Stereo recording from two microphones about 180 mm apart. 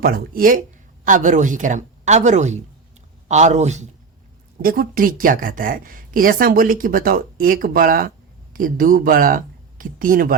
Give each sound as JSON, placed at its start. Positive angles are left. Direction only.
{"t": 0.0, "sound": "speech", "side_deg": -55}
{"t": 4.6, "sound": "speech", "side_deg": -55}